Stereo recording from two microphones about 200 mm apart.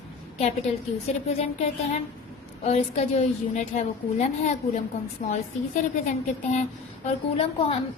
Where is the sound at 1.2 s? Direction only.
35° left (ahead or behind).